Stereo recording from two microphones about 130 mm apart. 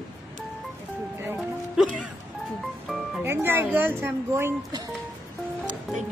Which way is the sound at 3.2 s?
20° right (ahead or behind).